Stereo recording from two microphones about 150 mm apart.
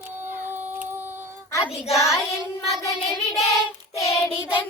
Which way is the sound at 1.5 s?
20° left (ahead or behind).